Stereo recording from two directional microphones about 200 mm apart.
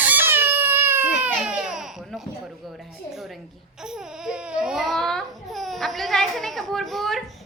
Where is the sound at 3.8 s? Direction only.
5° right (ahead or behind).